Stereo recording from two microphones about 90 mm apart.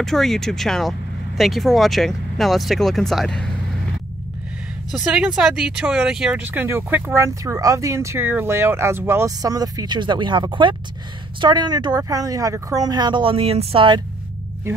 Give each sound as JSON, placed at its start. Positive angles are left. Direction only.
{"t": 0.0, "sound": "speech", "side_deg": 5}
{"t": 4.9, "sound": "speech", "side_deg": -10}
{"t": 6.4, "sound": "speech", "side_deg": -20}
{"t": 9.4, "sound": "speech", "side_deg": -40}
{"t": 11.4, "sound": "speech", "side_deg": -55}